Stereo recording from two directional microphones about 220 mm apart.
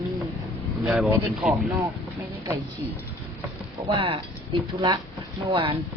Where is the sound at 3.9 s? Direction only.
25° right (ahead or behind).